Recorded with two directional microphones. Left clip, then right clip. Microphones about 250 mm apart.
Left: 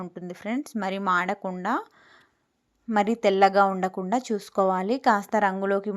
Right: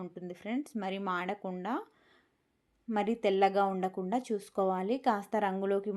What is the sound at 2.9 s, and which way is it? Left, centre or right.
A woman's voice, centre.